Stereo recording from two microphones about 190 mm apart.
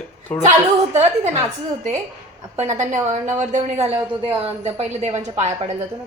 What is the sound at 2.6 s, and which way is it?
A woman's voice, 40° right (ahead or behind).